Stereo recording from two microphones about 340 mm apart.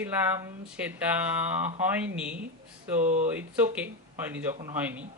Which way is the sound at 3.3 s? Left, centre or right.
Centre.